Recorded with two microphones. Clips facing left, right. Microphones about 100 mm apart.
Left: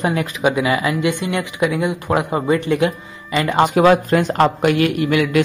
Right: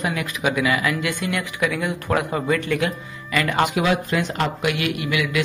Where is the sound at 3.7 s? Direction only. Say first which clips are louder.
Left 8 dB; 45° left (ahead or behind).